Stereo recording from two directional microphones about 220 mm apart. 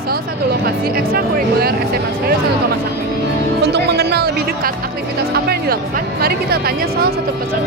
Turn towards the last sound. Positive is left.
turn(degrees=-45)  # may be behind; listen again after turning